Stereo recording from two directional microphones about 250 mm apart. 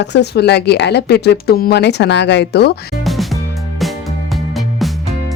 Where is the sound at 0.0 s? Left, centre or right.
Left.